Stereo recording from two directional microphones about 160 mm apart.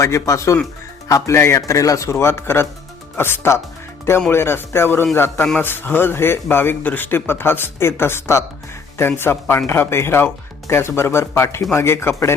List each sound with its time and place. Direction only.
0.0 s speech: 20° left (ahead or behind)